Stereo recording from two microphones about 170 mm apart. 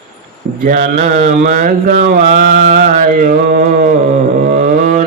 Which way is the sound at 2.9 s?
55° right (ahead or behind).